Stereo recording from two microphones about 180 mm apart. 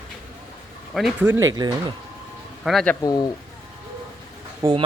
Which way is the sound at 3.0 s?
20° left (ahead or behind).